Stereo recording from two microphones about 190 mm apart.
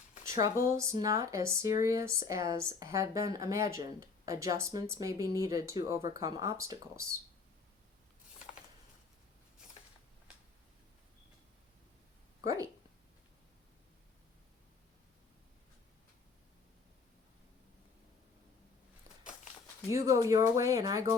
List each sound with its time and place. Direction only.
0.3 s speech: 15° right (ahead or behind)
19.9 s speech: 15° right (ahead or behind)